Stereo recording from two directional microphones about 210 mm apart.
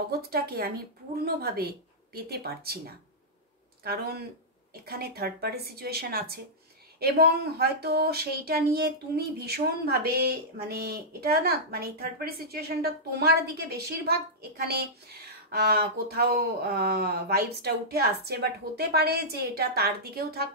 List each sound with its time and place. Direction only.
0.3 s speech: 45° right (ahead or behind)
3.8 s speech: 45° right (ahead or behind)